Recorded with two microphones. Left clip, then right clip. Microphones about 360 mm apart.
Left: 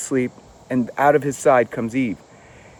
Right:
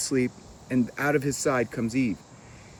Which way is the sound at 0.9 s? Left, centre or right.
Centre.